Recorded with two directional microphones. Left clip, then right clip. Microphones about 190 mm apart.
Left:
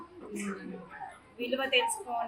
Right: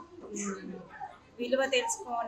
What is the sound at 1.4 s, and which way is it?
Speech, 20° right (ahead or behind).